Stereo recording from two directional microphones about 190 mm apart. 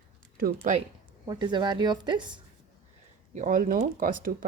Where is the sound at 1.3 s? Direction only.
25° right (ahead or behind).